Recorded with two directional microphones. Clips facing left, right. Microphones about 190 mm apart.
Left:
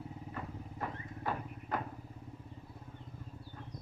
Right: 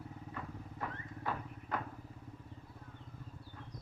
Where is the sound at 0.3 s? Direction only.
30° left (ahead or behind).